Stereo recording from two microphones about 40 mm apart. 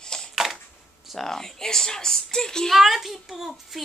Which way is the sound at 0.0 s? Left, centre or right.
Centre.